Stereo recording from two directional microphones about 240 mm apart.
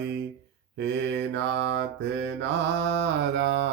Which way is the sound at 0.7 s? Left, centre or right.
Right.